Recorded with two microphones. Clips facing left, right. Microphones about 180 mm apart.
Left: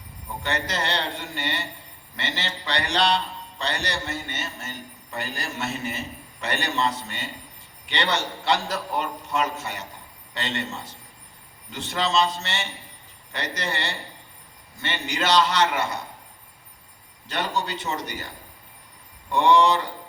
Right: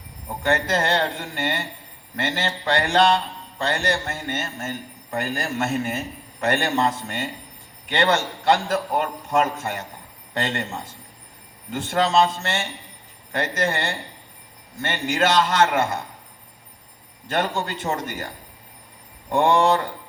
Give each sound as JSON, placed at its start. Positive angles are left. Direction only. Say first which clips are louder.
{"t": 0.4, "sound": "a man's voice", "louder": "right 6 dB", "side_deg": -50}
{"t": 17.2, "sound": "a man's voice", "louder": "right 3 dB", "side_deg": -50}
{"t": 19.3, "sound": "a man's voice", "louder": "right 1 dB", "side_deg": -50}